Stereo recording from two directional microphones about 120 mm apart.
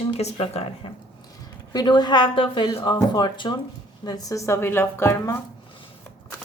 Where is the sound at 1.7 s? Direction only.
35° left (ahead or behind); by 5.3 s 20° left (ahead or behind).